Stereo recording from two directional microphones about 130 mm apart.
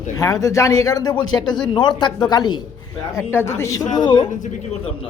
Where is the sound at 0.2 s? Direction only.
25° left (ahead or behind).